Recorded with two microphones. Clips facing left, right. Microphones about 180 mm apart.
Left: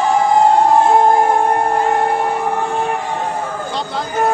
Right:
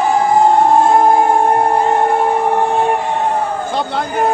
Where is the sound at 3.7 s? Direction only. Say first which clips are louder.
Right 4 dB; 65° right (ahead or behind).